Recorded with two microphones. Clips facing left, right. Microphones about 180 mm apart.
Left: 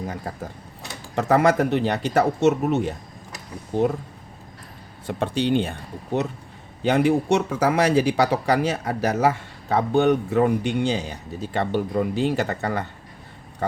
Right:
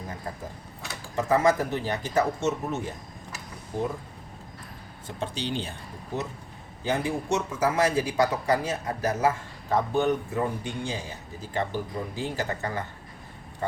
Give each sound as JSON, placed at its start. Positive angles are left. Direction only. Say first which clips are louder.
{"t": 1.1, "sound": "speech", "louder": "left 4 dB", "side_deg": 70}
{"t": 5.0, "sound": "speech", "louder": "left 9 dB", "side_deg": 60}
{"t": 6.8, "sound": "speech", "louder": "left 9 dB", "side_deg": 70}